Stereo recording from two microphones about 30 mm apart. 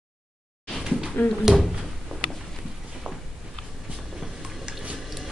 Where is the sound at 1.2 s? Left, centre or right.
Left.